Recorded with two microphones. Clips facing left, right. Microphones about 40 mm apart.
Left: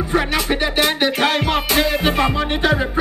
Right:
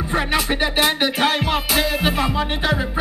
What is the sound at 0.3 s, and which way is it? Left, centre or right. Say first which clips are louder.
Music: left 1 dB; centre.